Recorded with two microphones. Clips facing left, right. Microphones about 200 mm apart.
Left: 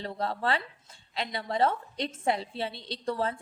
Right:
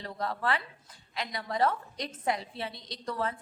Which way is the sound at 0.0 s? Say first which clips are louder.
Left 2 dB; 30° left (ahead or behind).